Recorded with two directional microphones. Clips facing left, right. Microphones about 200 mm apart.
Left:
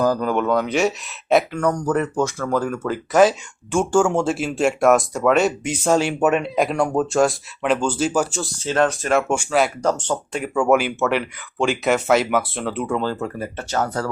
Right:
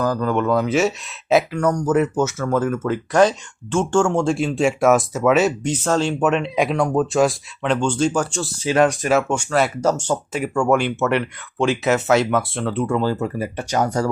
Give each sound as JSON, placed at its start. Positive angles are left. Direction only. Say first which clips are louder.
{"t": 0.0, "sound": "speech", "louder": "left 1 dB", "side_deg": 10}
{"t": 5.6, "sound": "speech", "louder": "left 1 dB", "side_deg": 10}
{"t": 8.6, "sound": "speech", "louder": "right 3 dB", "side_deg": -10}
{"t": 9.3, "sound": "speech", "louder": "even", "side_deg": 5}
{"t": 13.0, "sound": "speech", "louder": "right 3 dB", "side_deg": -10}